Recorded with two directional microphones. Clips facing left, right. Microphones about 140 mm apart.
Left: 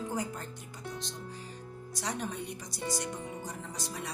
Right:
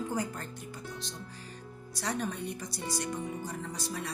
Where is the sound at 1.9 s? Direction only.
15° left (ahead or behind).